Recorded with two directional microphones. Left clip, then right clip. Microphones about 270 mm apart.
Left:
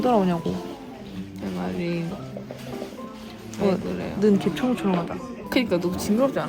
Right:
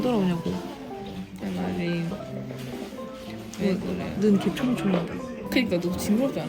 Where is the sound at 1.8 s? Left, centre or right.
Centre.